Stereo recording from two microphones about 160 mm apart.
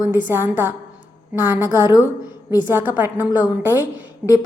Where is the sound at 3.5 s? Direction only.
15° right (ahead or behind).